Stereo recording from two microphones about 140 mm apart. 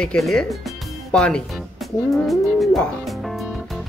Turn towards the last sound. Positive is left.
turn(degrees=0)  # may be behind; listen again after turning